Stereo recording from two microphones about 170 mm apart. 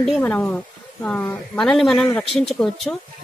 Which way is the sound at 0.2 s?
10° left (ahead or behind).